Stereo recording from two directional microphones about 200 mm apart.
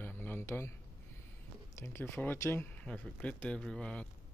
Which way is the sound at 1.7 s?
10° left (ahead or behind).